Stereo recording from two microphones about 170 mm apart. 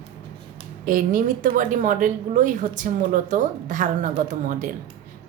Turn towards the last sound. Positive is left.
turn(degrees=-50)  # may be behind; listen again after turning